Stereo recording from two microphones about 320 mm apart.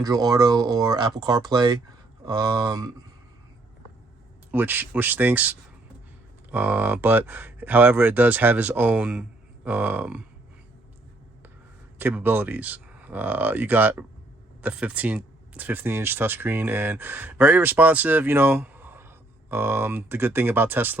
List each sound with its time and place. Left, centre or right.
0.0 s speech: centre
4.5 s speech: centre
11.9 s speech: centre